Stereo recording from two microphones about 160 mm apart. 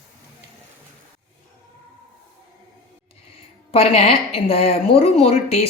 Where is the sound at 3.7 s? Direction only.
40° left (ahead or behind).